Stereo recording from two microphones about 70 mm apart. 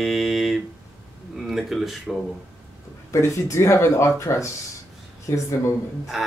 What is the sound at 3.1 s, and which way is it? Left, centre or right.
Speech, left.